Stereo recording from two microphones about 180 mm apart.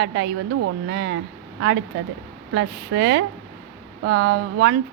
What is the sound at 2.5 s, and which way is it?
Speech, 75° right (ahead or behind).